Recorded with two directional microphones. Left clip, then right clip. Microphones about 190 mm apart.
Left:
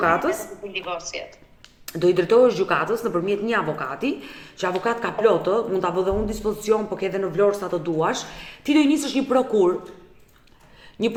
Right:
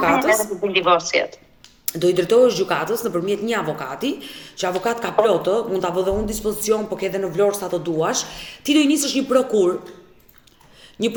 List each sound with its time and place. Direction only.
0.0 s a man's voice: 5° left (ahead or behind)
0.6 s a woman's voice: 25° right (ahead or behind)
1.9 s a man's voice: 5° left (ahead or behind)
11.0 s a man's voice: 5° left (ahead or behind)